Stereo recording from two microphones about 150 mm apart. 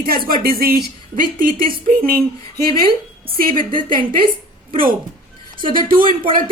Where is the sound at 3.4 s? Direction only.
65° right (ahead or behind).